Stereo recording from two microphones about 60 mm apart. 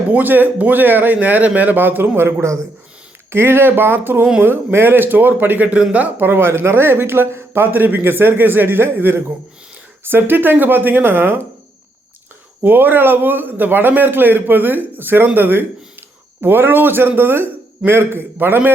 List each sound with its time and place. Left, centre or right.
0.1 s a man's voice: right
6.2 s a man's voice: right
12.6 s a man's voice: right